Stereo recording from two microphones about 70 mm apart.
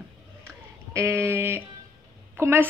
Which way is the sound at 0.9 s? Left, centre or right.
Right.